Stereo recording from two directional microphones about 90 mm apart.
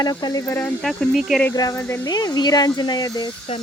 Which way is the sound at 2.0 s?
45° left (ahead or behind).